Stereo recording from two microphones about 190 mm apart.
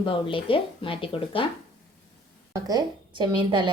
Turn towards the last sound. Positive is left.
turn(degrees=-25)  # may be behind; listen again after turning